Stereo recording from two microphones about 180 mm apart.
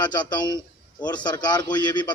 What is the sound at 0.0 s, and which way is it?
Speech, 25° left (ahead or behind).